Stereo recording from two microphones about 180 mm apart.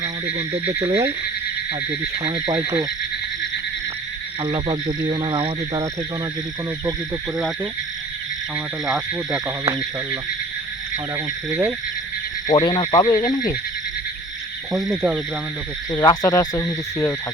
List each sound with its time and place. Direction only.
0.3 s speech: 35° right (ahead or behind)
2.2 s speech: 30° right (ahead or behind)
4.4 s speech: 25° right (ahead or behind)
7.3 s speech: centre (ahead or behind)
9.6 s speech: 25° right (ahead or behind)
11.4 s speech: 10° right (ahead or behind)
12.6 s speech: 25° left (ahead or behind)
14.7 s speech: centre (ahead or behind)
15.9 s speech: 20° left (ahead or behind)